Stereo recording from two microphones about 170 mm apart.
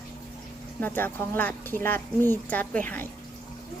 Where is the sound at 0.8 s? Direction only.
10° left (ahead or behind).